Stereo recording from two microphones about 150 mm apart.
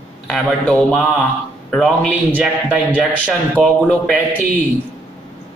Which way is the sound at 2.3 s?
10° right (ahead or behind).